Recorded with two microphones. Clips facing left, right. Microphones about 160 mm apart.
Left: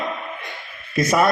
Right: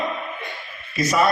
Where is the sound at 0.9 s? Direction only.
55° left (ahead or behind).